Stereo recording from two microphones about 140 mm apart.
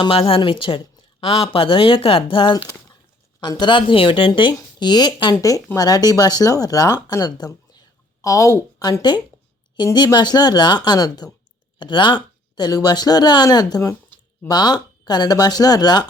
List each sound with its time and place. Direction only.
0.0 s a woman's voice: 40° left (ahead or behind)